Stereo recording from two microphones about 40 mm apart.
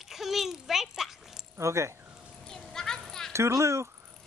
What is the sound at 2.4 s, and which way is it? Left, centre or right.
Children playing, centre.